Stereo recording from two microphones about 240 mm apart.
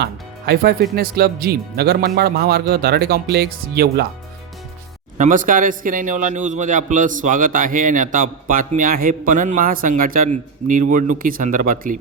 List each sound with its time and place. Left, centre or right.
0.0 s a man's voice: right
5.1 s a man's voice: right